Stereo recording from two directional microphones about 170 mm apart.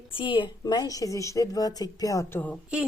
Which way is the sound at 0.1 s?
30° left (ahead or behind).